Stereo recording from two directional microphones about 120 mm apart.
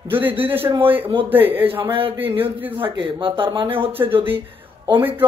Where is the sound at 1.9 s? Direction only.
50° right (ahead or behind).